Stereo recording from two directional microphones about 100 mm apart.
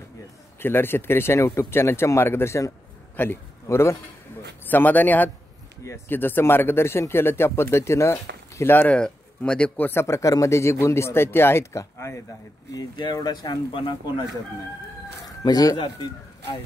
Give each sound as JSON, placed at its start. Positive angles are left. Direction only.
{"t": 0.6, "sound": "a man's voice", "side_deg": 20}
{"t": 8.9, "sound": "speech", "side_deg": 10}
{"t": 12.9, "sound": "speech", "side_deg": 45}
{"t": 15.2, "sound": "speech", "side_deg": 40}